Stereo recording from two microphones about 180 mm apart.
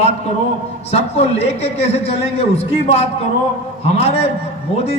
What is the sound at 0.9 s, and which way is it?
A man's voice, 35° left (ahead or behind).